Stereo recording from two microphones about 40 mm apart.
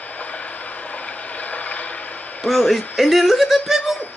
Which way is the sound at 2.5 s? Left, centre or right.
Centre.